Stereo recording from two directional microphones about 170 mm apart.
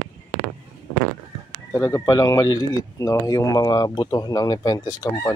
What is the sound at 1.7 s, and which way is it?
Speech, 15° left (ahead or behind).